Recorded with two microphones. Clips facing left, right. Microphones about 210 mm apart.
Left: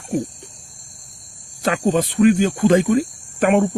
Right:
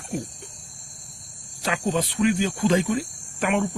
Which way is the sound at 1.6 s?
50° left (ahead or behind).